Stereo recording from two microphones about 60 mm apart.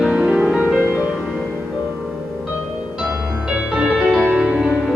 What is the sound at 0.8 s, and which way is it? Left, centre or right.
Music, right.